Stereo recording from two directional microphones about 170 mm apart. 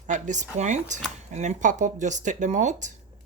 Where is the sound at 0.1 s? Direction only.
45° right (ahead or behind).